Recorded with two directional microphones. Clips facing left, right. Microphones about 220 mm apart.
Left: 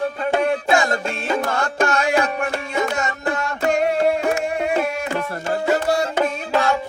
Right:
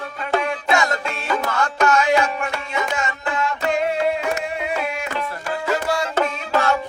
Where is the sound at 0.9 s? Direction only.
50° left (ahead or behind).